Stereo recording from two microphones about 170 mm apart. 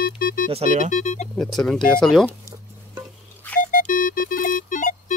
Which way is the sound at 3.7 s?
50° left (ahead or behind).